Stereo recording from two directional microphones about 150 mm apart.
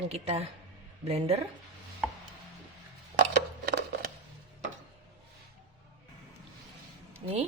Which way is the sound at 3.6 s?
90° right.